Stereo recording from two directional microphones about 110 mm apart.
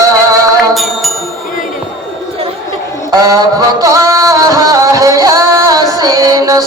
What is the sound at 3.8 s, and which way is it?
Music, 30° right (ahead or behind).